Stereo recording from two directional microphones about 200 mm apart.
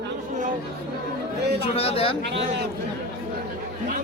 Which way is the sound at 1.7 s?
30° left (ahead or behind).